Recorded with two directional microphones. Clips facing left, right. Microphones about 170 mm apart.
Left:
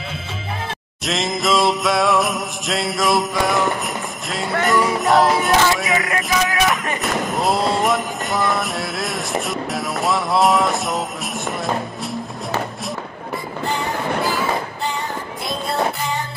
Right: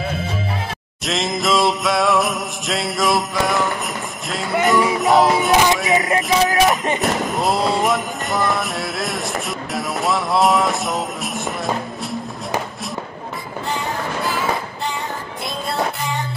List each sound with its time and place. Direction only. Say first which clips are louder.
1.0 s jingle bell: even; centre (ahead or behind)
4.6 s music: right 1 dB; centre (ahead or behind)
5.9 s music: right 3 dB; 20° right (ahead or behind)
6.3 s speech: right 3 dB; 35° right (ahead or behind)
7.0 s jingle bell: right 1 dB; centre (ahead or behind)